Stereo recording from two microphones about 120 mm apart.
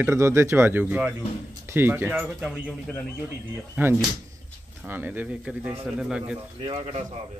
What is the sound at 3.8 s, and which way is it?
A man's voice, 15° right (ahead or behind).